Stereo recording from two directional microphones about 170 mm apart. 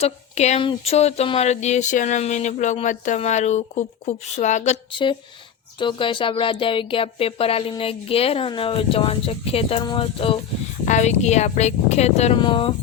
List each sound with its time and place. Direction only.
0.0 s speech: 40° left (ahead or behind)
5.8 s speech: 30° left (ahead or behind)
10.8 s speech: 45° left (ahead or behind)